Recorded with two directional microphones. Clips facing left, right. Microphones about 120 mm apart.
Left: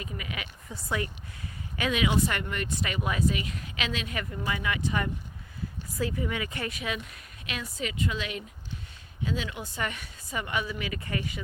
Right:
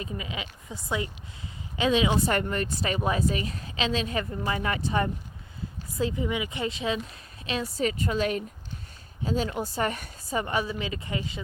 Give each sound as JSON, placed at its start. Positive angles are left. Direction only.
{"t": 0.0, "sound": "speech", "side_deg": -25}